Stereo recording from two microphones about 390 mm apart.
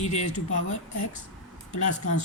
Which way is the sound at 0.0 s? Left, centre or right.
Centre.